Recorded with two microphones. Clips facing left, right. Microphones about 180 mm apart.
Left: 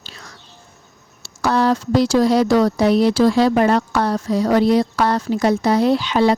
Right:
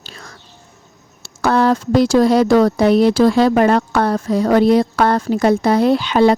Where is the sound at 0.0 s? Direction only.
50° right (ahead or behind).